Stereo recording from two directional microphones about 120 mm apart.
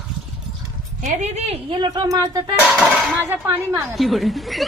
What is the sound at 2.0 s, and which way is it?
Speech, 30° right (ahead or behind).